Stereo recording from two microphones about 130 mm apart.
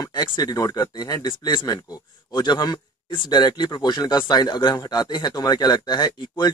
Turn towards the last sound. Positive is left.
turn(degrees=35)  # may be behind; listen again after turning